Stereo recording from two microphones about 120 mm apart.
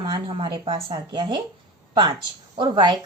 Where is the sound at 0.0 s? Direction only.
40° right (ahead or behind).